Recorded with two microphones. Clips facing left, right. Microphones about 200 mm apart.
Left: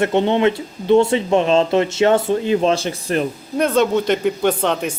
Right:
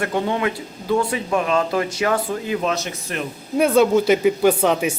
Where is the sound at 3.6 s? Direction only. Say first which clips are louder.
Right 1 dB; 5° right (ahead or behind).